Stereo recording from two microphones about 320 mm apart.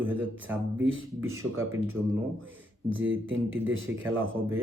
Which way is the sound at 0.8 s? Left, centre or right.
Right.